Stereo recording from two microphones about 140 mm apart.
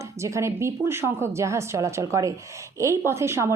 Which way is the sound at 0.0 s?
20° right (ahead or behind).